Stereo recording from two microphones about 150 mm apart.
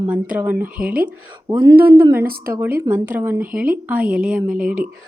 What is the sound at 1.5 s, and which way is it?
Speech, 25° right (ahead or behind).